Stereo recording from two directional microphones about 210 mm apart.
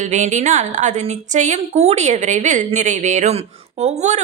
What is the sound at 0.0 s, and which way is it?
A woman's voice, 35° right (ahead or behind).